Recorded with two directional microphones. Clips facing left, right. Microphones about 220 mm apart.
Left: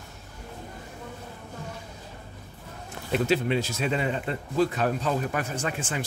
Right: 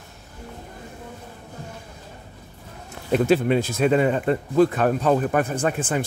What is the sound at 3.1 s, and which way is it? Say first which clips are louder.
Speech: right 6 dB; 50° right (ahead or behind).